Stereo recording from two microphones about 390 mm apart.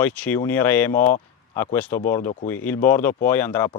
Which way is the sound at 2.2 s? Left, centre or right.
Centre.